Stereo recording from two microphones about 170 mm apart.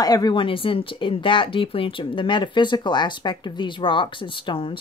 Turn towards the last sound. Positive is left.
turn(degrees=30)  # may be behind; listen again after turning